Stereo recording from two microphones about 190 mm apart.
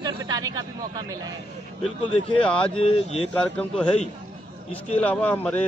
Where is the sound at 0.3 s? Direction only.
20° right (ahead or behind).